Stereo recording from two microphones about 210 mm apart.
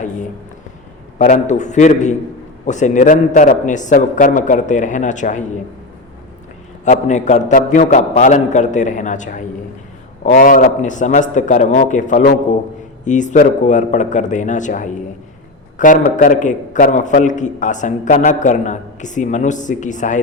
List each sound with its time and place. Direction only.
1.2 s a man's voice: 35° left (ahead or behind)
6.8 s a man's voice: 35° left (ahead or behind)